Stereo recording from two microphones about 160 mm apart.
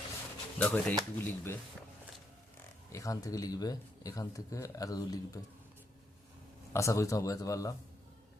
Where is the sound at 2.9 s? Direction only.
20° left (ahead or behind).